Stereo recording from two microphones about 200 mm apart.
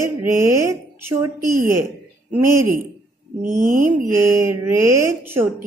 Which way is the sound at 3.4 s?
40° right (ahead or behind).